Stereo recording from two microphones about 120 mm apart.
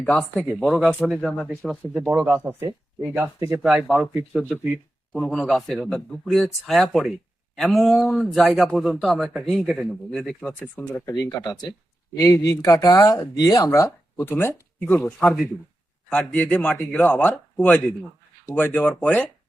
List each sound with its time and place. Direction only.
0.0 s speech: 10° left (ahead or behind)
1.8 s speech: 10° right (ahead or behind)
2.0 s speech: 20° right (ahead or behind)
3.6 s speech: 10° right (ahead or behind)
5.1 s speech: 5° left (ahead or behind)
10.8 s speech: 20° left (ahead or behind)
11.1 s speech: 30° left (ahead or behind)
16.0 s speech: 10° left (ahead or behind)
17.1 s speech: 15° left (ahead or behind)